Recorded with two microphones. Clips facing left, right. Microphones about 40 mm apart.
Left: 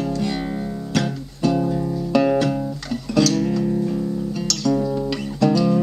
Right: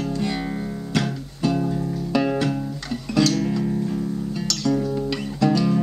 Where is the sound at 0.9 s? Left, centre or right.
Centre.